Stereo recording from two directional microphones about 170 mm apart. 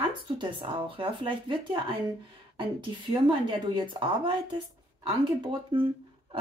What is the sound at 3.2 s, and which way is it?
Speech, 30° right (ahead or behind).